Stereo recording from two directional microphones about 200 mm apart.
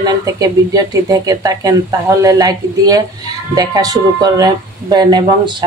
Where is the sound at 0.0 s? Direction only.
20° right (ahead or behind).